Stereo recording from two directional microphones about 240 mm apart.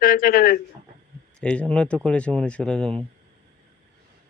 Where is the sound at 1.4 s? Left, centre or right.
Centre.